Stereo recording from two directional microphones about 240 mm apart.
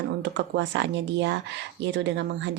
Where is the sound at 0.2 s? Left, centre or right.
Right.